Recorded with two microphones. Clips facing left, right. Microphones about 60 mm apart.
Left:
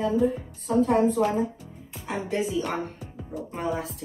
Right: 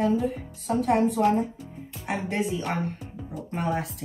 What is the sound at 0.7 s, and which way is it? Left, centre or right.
Speech, right.